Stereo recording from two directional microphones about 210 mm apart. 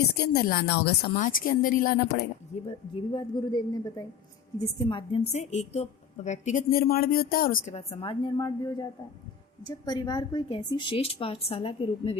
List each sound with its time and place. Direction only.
0.2 s a woman's voice: 50° left (ahead or behind)
3.1 s a woman's voice: 20° left (ahead or behind)
5.3 s a woman's voice: 35° left (ahead or behind)